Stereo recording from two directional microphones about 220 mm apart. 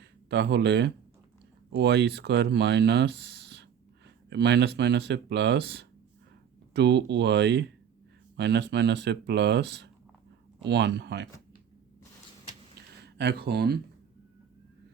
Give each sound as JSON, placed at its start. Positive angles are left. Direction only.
{"t": 0.0, "sound": "speech", "side_deg": -50}
{"t": 13.0, "sound": "speech", "side_deg": -50}